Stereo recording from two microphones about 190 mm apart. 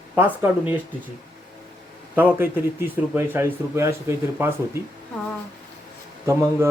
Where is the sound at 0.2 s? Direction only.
10° right (ahead or behind).